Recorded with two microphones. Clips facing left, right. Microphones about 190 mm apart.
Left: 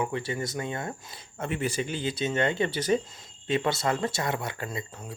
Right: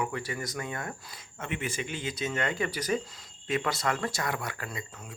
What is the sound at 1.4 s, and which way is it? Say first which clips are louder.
Speech: left 5 dB; 35° left (ahead or behind).